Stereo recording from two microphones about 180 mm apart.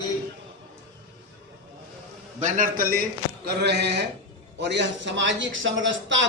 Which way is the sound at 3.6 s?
70° right (ahead or behind).